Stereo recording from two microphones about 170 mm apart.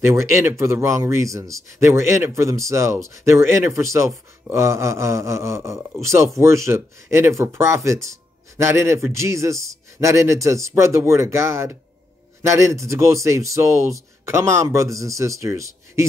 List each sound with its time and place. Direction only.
0.0 s speech: 15° right (ahead or behind)